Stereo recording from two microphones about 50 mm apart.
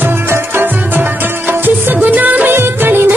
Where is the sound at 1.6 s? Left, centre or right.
Right.